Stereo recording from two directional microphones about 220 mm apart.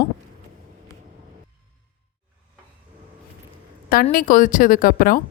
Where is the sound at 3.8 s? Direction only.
40° left (ahead or behind).